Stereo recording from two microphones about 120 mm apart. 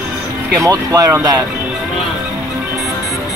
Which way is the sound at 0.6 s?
30° right (ahead or behind).